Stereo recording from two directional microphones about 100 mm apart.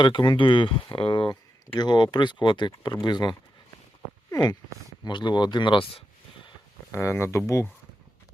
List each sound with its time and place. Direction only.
0.0 s speech: 50° left (ahead or behind)
4.3 s a sound: 40° left (ahead or behind)
5.0 s speech: 45° left (ahead or behind)
6.9 s speech: 30° left (ahead or behind)